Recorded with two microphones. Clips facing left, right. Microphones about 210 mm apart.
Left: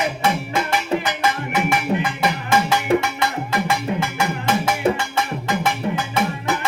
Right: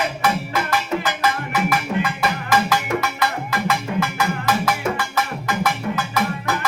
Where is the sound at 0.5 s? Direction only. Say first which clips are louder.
Left 1 dB; 25° left (ahead or behind).